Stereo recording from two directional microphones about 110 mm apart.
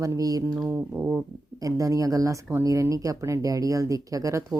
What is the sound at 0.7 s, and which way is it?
Brass instrument, 10° right (ahead or behind).